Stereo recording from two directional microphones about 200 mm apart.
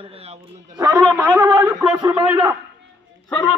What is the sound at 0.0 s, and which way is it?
Speech, 30° right (ahead or behind).